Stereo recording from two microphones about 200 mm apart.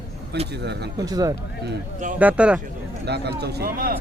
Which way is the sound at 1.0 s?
20° right (ahead or behind).